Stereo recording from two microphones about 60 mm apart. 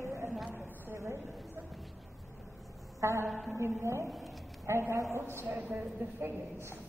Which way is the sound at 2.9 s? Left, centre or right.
Right.